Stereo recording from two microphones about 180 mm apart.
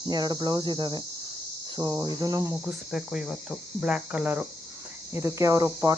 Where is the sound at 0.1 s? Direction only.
25° right (ahead or behind).